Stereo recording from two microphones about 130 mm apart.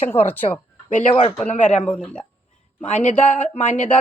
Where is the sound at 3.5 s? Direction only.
70° left (ahead or behind).